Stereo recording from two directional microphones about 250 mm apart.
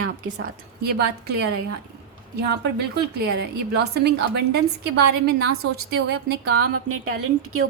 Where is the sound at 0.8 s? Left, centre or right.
Right.